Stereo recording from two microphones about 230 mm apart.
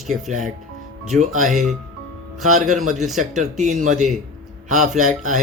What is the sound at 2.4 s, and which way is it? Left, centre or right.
Speech, right.